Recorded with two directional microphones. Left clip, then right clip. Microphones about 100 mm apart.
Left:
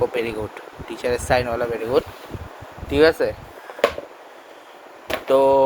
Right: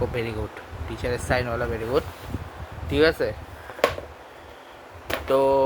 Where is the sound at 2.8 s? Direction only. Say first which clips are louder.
Left 4 dB; 5° right (ahead or behind).